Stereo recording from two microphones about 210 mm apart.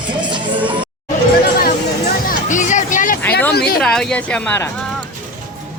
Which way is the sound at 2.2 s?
35° left (ahead or behind).